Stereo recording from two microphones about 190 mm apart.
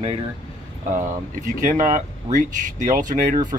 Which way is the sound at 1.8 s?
45° right (ahead or behind).